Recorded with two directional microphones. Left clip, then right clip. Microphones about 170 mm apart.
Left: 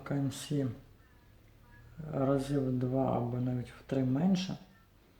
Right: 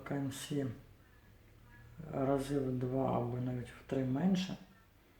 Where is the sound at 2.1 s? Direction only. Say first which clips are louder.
Left 3 dB; 30° left (ahead or behind).